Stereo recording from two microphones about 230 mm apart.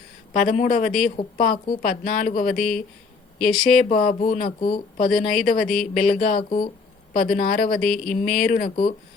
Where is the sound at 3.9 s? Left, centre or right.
Left.